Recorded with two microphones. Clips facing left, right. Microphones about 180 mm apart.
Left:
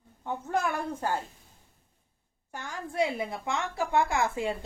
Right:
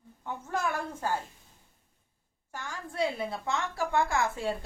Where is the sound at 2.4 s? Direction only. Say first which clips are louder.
Left 2 dB; 15° left (ahead or behind).